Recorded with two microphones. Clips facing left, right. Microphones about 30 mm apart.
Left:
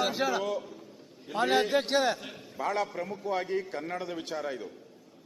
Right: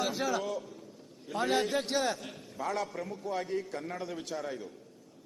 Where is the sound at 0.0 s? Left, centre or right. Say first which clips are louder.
Left 3 dB; centre.